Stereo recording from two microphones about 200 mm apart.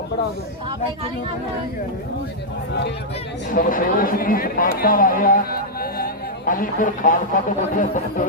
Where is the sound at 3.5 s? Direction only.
45° left (ahead or behind).